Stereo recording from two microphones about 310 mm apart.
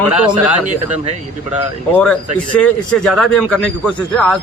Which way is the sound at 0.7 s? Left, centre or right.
Right.